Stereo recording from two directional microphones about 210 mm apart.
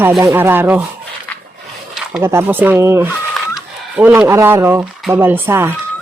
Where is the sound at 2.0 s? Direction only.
5° right (ahead or behind).